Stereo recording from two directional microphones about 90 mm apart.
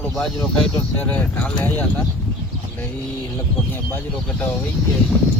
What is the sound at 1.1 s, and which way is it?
Speech, 20° left (ahead or behind).